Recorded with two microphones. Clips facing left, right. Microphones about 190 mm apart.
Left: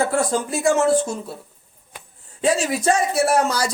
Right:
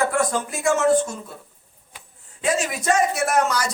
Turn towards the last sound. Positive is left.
turn(degrees=30)  # may be behind; listen again after turning